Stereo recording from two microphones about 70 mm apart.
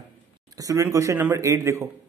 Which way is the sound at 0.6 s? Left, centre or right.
Right.